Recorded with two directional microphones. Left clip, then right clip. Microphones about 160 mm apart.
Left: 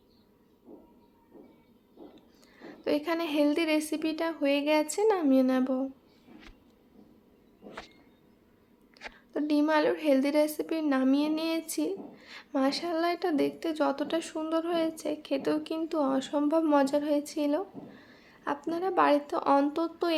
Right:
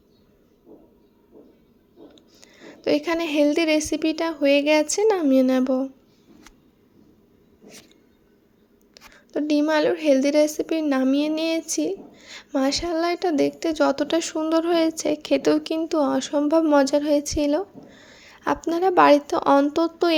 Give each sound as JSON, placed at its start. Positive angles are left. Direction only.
{"t": 2.1, "sound": "a woman's voice", "side_deg": -35}
{"t": 9.0, "sound": "a sound", "side_deg": -30}
{"t": 9.3, "sound": "a woman's voice", "side_deg": -30}